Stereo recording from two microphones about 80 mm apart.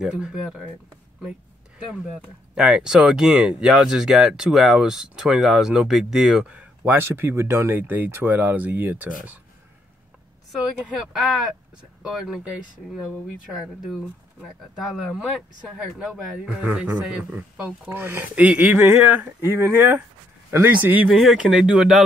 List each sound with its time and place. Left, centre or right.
0.0 s speech: centre
2.5 s speech: centre
6.8 s speech: right
11.0 s speech: centre
15.1 s speech: centre
16.6 s speech: centre
17.9 s speech: right
18.3 s speech: centre
19.2 s speech: right
21.1 s speech: centre
21.4 s speech: centre